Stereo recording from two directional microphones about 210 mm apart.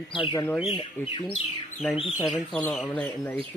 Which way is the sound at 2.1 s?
Centre (ahead or behind).